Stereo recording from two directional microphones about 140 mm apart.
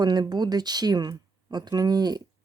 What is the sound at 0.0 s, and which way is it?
Speech, 30° right (ahead or behind).